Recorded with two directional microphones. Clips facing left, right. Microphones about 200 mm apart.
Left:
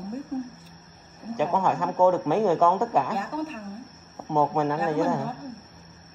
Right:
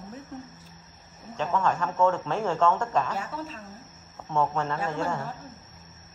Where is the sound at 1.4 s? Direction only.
10° left (ahead or behind).